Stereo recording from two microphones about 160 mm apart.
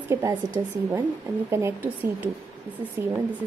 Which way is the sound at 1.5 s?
15° right (ahead or behind).